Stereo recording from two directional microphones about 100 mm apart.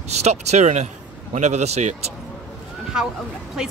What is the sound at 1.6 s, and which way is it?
Speech, 90° right.